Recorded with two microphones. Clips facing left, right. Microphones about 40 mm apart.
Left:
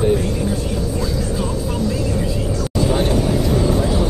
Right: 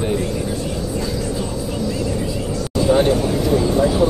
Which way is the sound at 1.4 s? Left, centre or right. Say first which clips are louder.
Left 2 dB; centre.